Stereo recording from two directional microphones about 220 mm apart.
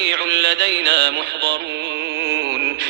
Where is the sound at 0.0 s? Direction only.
50° right (ahead or behind).